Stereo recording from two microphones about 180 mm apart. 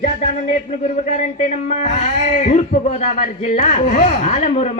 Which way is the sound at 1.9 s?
40° left (ahead or behind).